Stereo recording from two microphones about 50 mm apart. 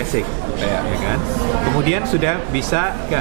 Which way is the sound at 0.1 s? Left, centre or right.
Right.